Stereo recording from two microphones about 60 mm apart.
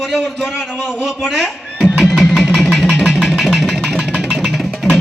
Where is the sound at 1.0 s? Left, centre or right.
Centre.